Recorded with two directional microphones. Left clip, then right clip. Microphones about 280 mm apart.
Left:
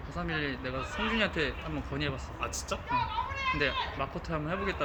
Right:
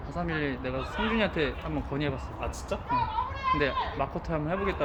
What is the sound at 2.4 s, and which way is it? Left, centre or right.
Speech, centre.